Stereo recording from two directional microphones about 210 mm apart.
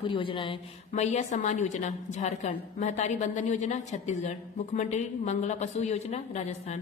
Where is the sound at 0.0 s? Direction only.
25° left (ahead or behind).